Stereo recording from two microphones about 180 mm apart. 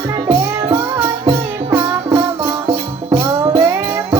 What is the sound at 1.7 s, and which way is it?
Music, 15° right (ahead or behind).